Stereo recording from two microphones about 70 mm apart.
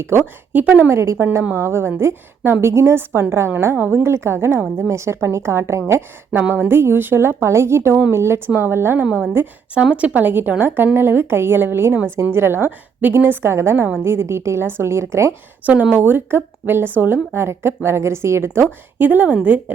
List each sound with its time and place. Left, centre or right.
0.0 s a woman's voice: right
0.9 s a woman's voice: right
9.9 s a woman's voice: centre; by 15.4 s right
15.6 s a woman's voice: right
18.6 s a woman's voice: right